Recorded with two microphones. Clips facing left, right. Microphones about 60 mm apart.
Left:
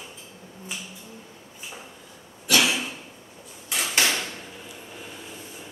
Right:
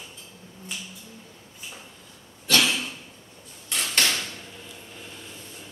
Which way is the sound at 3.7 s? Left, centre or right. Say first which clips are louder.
Left 1 dB; centre.